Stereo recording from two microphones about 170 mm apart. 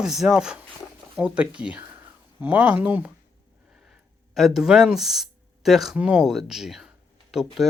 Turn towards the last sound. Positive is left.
turn(degrees=0)  # may be behind; listen again after turning